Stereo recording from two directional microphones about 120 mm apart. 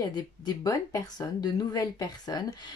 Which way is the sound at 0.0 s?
35° left (ahead or behind).